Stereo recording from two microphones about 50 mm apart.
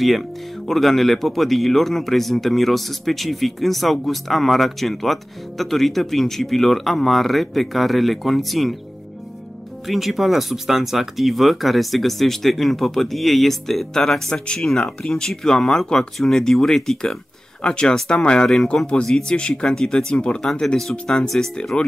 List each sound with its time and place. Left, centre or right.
0.0 s speech: centre
9.8 s speech: centre
17.6 s speech: centre
19.0 s speech: centre
19.3 s speech: centre
20.6 s speech: centre
21.4 s speech: centre